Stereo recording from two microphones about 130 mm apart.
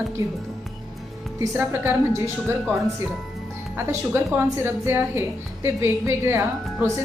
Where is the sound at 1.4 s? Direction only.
15° right (ahead or behind).